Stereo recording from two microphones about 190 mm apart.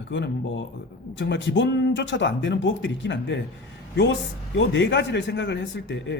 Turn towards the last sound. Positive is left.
turn(degrees=75)  # may be behind; listen again after turning